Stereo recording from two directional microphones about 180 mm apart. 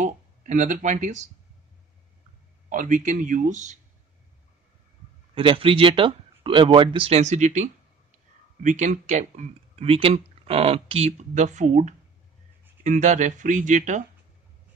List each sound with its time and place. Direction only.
0.0 s speech: 45° right (ahead or behind)
2.7 s speech: 45° right (ahead or behind)
5.3 s speech: 30° right (ahead or behind)